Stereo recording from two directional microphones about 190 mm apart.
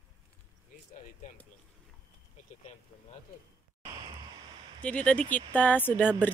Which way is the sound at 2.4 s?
40° left (ahead or behind).